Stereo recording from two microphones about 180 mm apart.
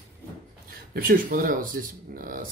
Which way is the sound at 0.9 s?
50° right (ahead or behind).